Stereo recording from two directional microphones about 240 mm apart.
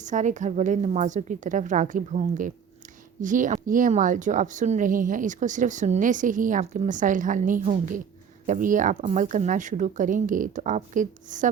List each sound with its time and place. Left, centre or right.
0.0 s speech: right